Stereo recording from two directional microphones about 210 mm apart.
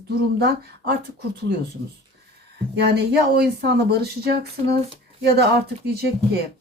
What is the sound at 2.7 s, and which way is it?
Speech, 50° right (ahead or behind).